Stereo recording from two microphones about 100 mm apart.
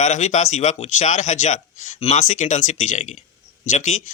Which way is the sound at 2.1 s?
85° left.